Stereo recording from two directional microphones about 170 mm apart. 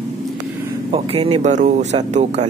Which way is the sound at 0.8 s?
35° right (ahead or behind).